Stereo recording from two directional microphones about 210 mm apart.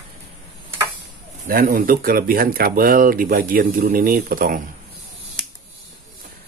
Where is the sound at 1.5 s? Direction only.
40° right (ahead or behind).